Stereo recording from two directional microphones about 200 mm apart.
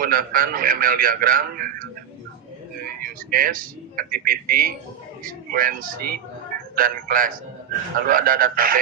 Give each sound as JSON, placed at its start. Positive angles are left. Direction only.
{"t": 0.0, "sound": "a man's voice", "side_deg": -45}